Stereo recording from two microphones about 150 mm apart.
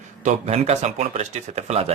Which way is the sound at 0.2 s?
50° right (ahead or behind).